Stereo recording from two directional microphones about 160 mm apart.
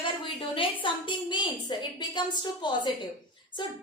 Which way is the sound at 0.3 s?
35° left (ahead or behind).